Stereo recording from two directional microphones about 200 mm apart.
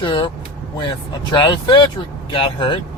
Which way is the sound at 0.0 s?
25° left (ahead or behind).